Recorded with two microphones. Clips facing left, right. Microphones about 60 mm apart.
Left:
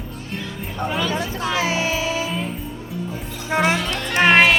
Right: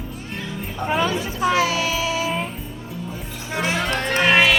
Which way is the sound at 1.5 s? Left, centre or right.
Left.